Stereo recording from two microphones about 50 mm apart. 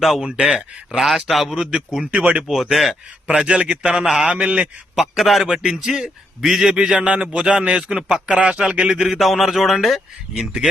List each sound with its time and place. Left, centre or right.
0.0 s a man's voice: centre
0.5 s a man's voice: centre
1.0 s a man's voice: centre
2.0 s speech: right
2.6 s a man's voice: centre
3.4 s speech: right
4.3 s speech: right
4.9 s a man's voice: centre
9.0 s a man's voice: centre